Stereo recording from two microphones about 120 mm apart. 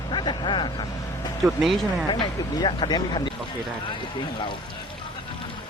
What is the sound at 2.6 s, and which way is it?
Speech, 40° left (ahead or behind).